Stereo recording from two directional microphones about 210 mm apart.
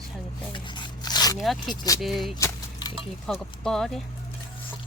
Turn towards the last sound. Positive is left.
turn(degrees=0)  # may be behind; listen again after turning